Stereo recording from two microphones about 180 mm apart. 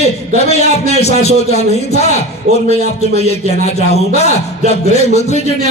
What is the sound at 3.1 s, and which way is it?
Speech, 35° left (ahead or behind).